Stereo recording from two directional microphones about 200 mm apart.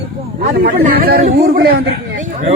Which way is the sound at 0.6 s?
50° right (ahead or behind).